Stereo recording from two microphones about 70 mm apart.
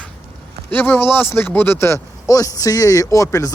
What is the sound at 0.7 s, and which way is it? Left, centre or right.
Speech, left.